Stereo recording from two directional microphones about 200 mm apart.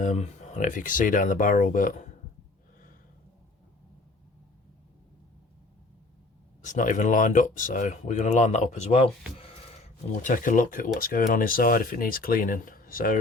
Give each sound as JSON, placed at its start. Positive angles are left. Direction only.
{"t": 0.0, "sound": "speech", "side_deg": 40}
{"t": 6.6, "sound": "speech", "side_deg": 40}
{"t": 10.2, "sound": "speech", "side_deg": 40}